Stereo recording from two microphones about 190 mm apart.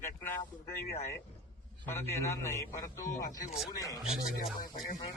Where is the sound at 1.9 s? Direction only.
15° left (ahead or behind).